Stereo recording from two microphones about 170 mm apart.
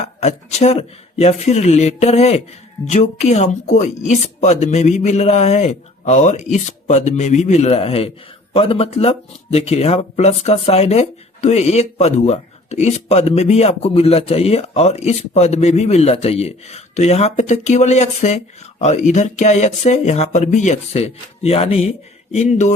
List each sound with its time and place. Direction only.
0.0 s speech: 40° left (ahead or behind)